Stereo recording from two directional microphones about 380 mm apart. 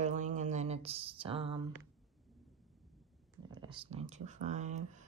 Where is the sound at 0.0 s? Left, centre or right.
Centre.